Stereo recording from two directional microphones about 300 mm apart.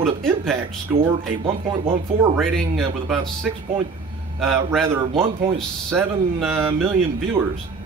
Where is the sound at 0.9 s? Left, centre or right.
Centre.